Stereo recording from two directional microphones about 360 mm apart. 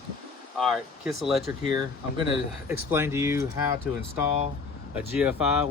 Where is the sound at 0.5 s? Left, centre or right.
Centre.